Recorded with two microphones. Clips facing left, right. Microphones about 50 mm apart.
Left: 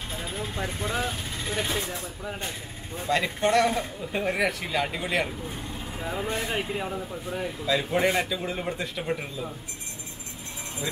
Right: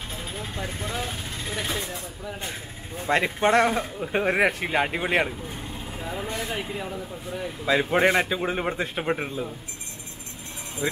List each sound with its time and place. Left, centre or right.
0.1 s vehicle: centre
3.1 s a man's voice: right
5.5 s vehicle: centre
6.4 s speech: centre
7.6 s a man's voice: right
10.8 s a man's voice: right